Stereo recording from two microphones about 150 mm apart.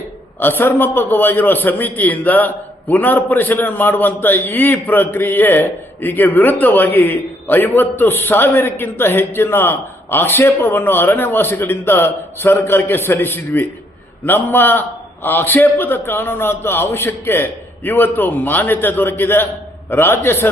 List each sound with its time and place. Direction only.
0.3 s a man's voice: 15° left (ahead or behind)